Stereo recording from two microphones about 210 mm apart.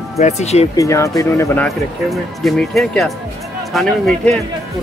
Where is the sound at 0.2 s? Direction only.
30° left (ahead or behind).